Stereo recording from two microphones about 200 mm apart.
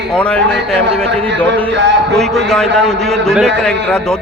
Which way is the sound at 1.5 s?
60° right (ahead or behind).